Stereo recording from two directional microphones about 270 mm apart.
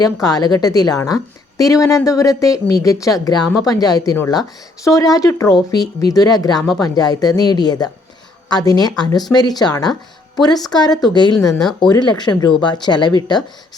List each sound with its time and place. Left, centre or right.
0.0 s a woman's voice: centre